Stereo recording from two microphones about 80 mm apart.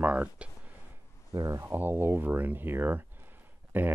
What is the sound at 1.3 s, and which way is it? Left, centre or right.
Speech, right.